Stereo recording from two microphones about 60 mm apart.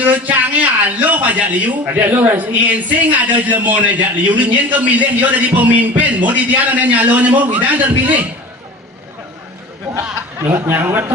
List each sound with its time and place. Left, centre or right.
0.0 s a man's voice: right
10.4 s speech: right